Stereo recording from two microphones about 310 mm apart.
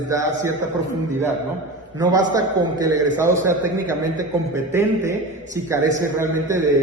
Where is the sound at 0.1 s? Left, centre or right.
Centre.